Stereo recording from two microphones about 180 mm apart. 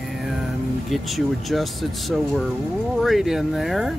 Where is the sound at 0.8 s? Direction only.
Centre (ahead or behind).